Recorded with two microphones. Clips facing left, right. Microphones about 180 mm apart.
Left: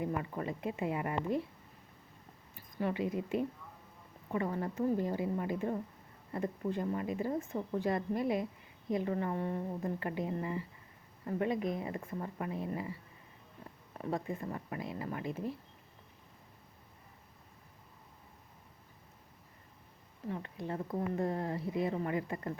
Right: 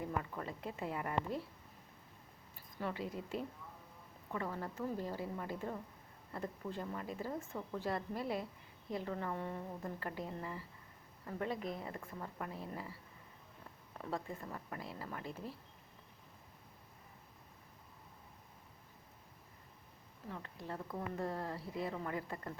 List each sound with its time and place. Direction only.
0.0 s speech: 15° left (ahead or behind)
2.8 s speech: 15° left (ahead or behind)
14.0 s speech: 15° left (ahead or behind)
20.6 s speech: 20° left (ahead or behind)